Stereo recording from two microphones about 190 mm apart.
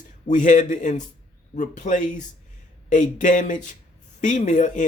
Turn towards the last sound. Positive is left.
turn(degrees=40)  # may be behind; listen again after turning